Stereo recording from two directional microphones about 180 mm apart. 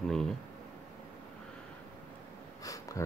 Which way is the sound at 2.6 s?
20° left (ahead or behind).